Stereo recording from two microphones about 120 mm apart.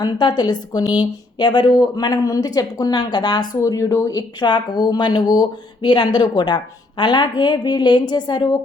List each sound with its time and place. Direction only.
0.0 s a woman's voice: 35° left (ahead or behind)